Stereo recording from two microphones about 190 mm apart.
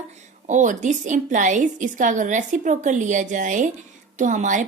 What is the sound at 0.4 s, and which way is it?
A woman's voice, 40° right (ahead or behind).